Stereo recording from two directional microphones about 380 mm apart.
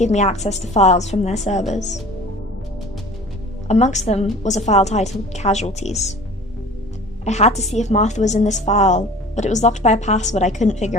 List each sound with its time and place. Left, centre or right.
0.0 s a woman's voice: centre
3.7 s a woman's voice: centre
7.3 s a woman's voice: centre